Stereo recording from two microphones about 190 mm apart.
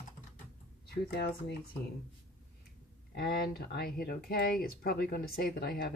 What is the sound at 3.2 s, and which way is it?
A woman's voice, 55° left (ahead or behind).